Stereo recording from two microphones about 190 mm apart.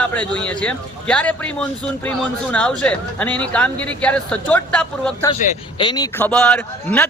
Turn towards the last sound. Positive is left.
turn(degrees=5)  # may be behind; listen again after turning